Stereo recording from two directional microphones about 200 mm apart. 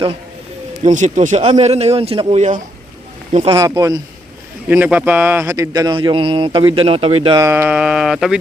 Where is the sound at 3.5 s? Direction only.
15° right (ahead or behind).